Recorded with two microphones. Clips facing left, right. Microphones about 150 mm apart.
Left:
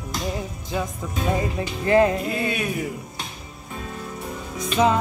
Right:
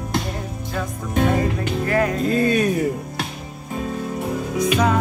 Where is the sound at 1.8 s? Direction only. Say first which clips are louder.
Left 3 dB; 25° left (ahead or behind).